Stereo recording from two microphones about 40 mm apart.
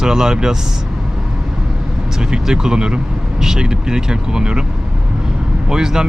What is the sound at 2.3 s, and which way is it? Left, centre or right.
Speech, centre.